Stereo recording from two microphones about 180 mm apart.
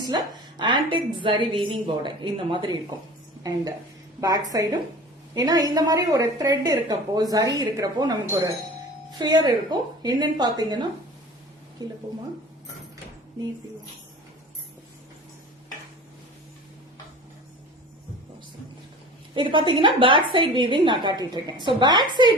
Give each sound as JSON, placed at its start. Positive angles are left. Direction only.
{"t": 0.0, "sound": "a woman's voice", "side_deg": -25}
{"t": 4.2, "sound": "a woman's voice", "side_deg": -20}
{"t": 11.8, "sound": "a woman's voice", "side_deg": -20}
{"t": 19.3, "sound": "a woman's voice", "side_deg": -30}